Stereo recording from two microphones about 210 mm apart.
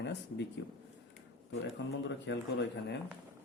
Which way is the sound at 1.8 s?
60° left (ahead or behind).